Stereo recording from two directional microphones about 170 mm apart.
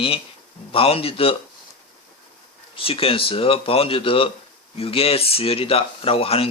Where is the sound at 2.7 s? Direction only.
35° left (ahead or behind).